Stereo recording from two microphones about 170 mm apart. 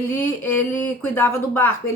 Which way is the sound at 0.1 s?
10° left (ahead or behind).